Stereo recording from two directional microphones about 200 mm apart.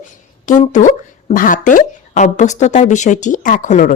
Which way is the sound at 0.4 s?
40° left (ahead or behind).